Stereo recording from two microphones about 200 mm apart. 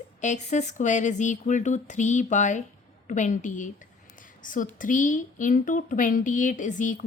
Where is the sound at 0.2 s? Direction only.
35° left (ahead or behind).